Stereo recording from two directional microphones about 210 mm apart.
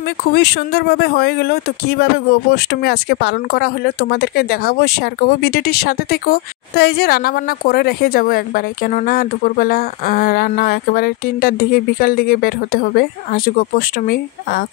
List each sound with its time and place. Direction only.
0.2 s speech: 50° left (ahead or behind)